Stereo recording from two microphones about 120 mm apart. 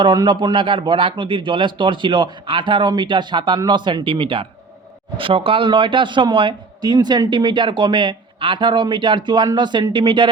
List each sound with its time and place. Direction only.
0.3 s speech: 40° right (ahead or behind)